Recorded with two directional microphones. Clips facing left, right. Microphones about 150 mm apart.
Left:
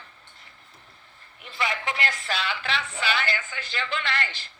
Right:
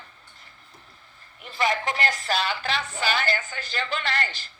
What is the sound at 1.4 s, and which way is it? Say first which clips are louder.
Speech: right 4 dB; 40° right (ahead or behind).